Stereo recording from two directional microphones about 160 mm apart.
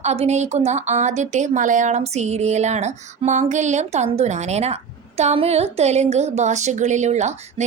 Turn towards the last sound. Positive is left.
turn(degrees=-45)  # may be behind; listen again after turning